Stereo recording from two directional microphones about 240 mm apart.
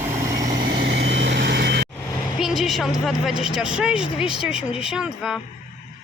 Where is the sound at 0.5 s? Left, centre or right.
Right.